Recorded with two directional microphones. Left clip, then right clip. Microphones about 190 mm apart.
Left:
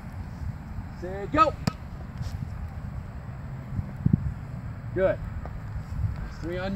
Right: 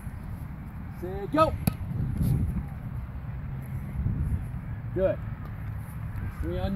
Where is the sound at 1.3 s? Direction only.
10° left (ahead or behind).